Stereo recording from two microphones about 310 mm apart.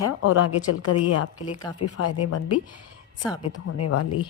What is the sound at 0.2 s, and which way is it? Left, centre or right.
A woman's voice, left.